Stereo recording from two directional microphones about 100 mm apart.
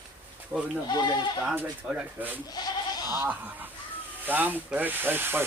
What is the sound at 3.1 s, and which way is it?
Speech, 20° right (ahead or behind).